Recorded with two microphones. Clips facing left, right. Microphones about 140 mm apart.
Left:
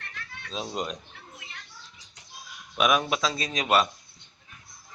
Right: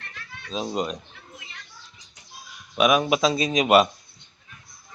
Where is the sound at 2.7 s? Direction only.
5° right (ahead or behind).